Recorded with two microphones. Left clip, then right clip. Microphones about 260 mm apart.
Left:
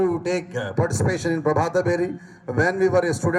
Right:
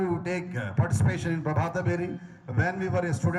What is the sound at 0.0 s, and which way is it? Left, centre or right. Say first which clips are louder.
A man's voice: left 7 dB; left.